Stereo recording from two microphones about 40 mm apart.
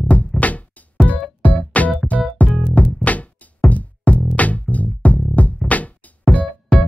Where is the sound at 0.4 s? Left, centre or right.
Left.